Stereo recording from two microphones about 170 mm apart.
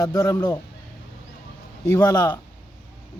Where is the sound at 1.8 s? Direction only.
20° left (ahead or behind).